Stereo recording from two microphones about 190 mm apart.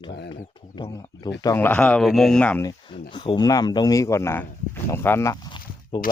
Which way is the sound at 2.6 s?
25° left (ahead or behind).